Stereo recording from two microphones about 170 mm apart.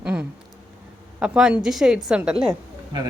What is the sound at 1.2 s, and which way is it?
Speech, 5° right (ahead or behind).